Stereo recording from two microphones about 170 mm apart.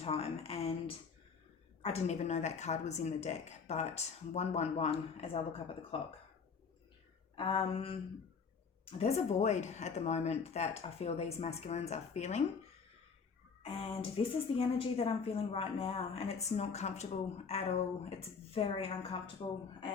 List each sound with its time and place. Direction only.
0.0 s speech: 35° left (ahead or behind)
1.8 s speech: 40° left (ahead or behind)
7.3 s speech: 30° left (ahead or behind)
13.6 s speech: 35° left (ahead or behind)